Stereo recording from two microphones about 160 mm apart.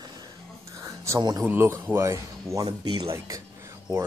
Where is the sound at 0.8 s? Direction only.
20° right (ahead or behind).